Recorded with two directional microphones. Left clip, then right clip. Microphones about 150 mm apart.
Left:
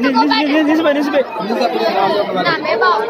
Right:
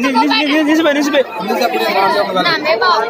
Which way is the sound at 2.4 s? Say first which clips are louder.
Even; 45° right (ahead or behind).